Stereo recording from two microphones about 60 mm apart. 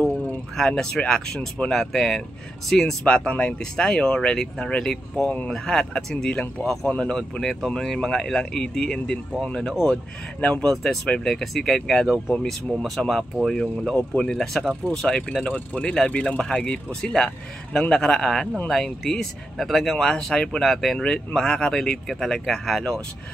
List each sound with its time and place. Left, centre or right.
0.6 s speech: centre
3.1 s speech: centre
5.2 s speech: left
5.5 s speech: centre
6.9 s speech: left
7.2 s speech: centre
13.0 s speech: centre
13.9 s speech: centre
15.4 s speech: left; by 21.0 s centre
21.0 s speech: centre